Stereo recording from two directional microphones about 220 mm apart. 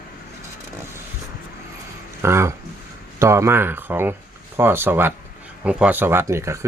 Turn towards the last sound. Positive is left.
turn(degrees=-10)  # may be behind; listen again after turning